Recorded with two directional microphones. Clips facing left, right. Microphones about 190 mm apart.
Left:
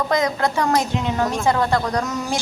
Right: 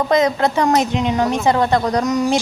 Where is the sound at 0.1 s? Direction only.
20° right (ahead or behind).